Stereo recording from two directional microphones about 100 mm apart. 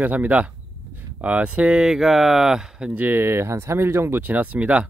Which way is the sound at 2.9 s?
20° right (ahead or behind).